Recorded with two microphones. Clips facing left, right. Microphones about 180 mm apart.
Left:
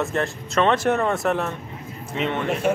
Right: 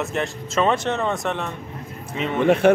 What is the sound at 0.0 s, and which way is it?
Speech, centre (ahead or behind).